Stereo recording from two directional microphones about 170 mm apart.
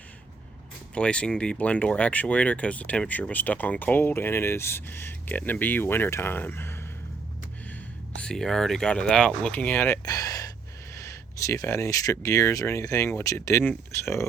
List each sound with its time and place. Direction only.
0.9 s speech: 5° left (ahead or behind)
8.2 s speech: 5° left (ahead or behind)